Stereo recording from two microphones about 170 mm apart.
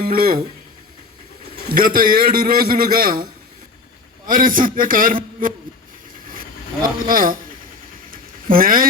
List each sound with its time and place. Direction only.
0.0 s a man's voice: 60° right (ahead or behind)
1.7 s a man's voice: 55° right (ahead or behind)
4.3 s a man's voice: 55° right (ahead or behind)
7.1 s a man's voice: 55° right (ahead or behind)
8.1 s a sound: 55° right (ahead or behind)